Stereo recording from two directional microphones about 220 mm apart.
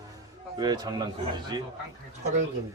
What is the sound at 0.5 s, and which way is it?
Speech, 15° right (ahead or behind).